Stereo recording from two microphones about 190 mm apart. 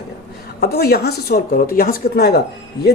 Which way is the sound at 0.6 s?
55° left (ahead or behind).